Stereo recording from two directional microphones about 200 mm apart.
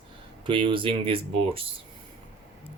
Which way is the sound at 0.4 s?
25° right (ahead or behind).